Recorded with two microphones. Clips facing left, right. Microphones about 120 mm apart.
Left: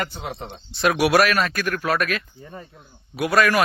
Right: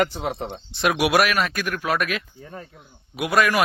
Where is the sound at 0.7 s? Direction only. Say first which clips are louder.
Left 2 dB; 15° right (ahead or behind).